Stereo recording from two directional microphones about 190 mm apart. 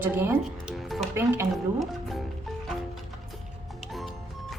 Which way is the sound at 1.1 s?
10° right (ahead or behind).